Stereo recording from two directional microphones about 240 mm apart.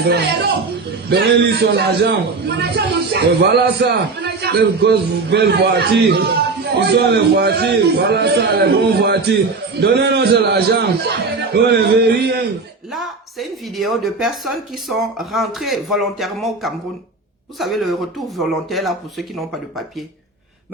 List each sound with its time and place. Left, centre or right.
0.1 s a man's voice: right
12.9 s speech: centre